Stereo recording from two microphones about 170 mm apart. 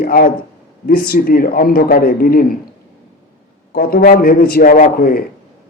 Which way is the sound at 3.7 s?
60° left (ahead or behind).